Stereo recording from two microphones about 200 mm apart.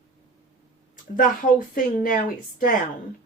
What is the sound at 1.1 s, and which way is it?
Speech, 40° left (ahead or behind).